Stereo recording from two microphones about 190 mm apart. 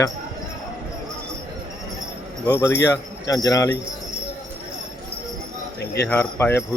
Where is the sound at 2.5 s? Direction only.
10° left (ahead or behind).